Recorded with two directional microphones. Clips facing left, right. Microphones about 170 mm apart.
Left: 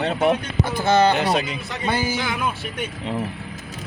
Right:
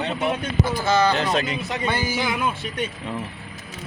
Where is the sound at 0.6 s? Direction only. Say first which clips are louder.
Left 3 dB; 55° left (ahead or behind).